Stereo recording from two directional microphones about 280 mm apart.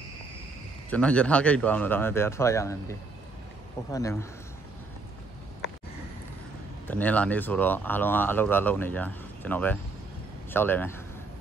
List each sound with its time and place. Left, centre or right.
0.8 s speech: centre
6.9 s speech: centre